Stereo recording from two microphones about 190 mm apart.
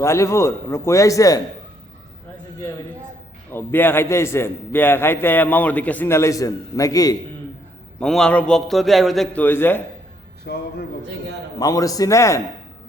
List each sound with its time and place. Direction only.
0.0 s a man's voice: 15° left (ahead or behind)
3.5 s a man's voice: 10° left (ahead or behind)
7.9 s a man's voice: 5° left (ahead or behind)
10.4 s a man's voice: 55° left (ahead or behind)
11.6 s a man's voice: 20° left (ahead or behind)